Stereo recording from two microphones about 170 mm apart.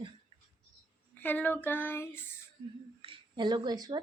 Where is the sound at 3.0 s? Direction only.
30° right (ahead or behind).